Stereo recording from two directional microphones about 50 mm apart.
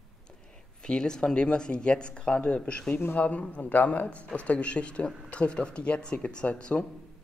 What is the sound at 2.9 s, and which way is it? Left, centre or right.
Speech, left.